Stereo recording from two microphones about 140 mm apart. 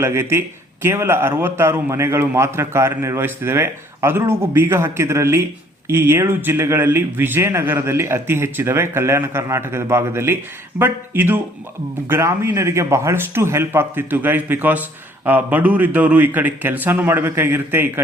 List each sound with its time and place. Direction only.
0.0 s a man's voice: 20° right (ahead or behind)